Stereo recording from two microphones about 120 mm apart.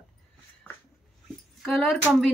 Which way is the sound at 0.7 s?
20° left (ahead or behind).